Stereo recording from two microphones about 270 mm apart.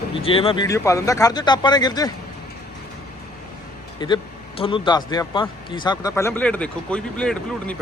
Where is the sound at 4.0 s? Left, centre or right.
Centre.